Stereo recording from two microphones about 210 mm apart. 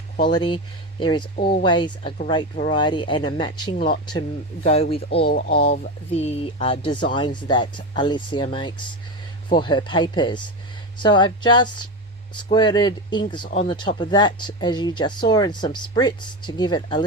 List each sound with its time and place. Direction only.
0.3 s speech: 20° left (ahead or behind)
1.4 s speech: 45° left (ahead or behind)
1.6 s speech: 20° left (ahead or behind)
5.0 s speech: 45° left (ahead or behind)
6.2 s speech: 30° left (ahead or behind)
9.5 s speech: 20° left (ahead or behind)